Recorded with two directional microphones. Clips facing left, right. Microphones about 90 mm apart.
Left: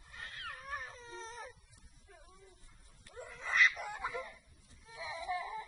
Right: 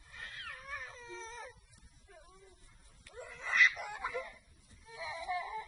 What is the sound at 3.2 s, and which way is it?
Dog, 35° left (ahead or behind).